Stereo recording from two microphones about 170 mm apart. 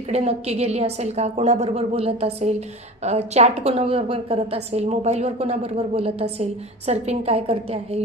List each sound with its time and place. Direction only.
0.1 s a woman's voice: 40° right (ahead or behind)